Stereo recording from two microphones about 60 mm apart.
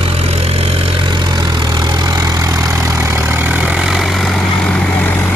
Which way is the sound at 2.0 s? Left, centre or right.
Right.